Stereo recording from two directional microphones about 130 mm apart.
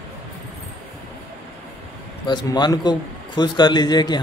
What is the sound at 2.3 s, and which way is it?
A man's voice, 35° left (ahead or behind).